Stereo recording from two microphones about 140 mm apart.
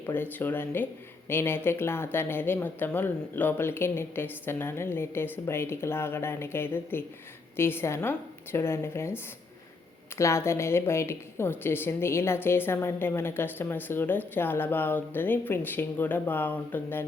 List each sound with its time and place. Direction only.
0.0 s a woman's voice: 15° left (ahead or behind)